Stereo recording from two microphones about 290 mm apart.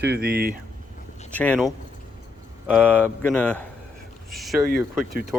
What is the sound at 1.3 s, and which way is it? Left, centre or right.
Speech, centre.